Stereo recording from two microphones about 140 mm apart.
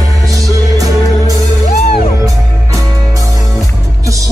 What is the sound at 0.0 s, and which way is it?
Music, 25° right (ahead or behind).